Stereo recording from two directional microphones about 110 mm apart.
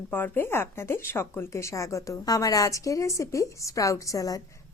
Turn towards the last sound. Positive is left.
turn(degrees=30)  # may be behind; listen again after turning